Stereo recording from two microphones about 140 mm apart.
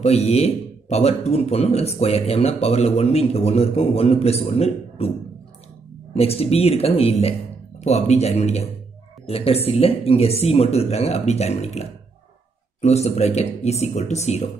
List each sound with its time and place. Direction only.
0.0 s speech: 50° left (ahead or behind)
6.1 s speech: 45° left (ahead or behind)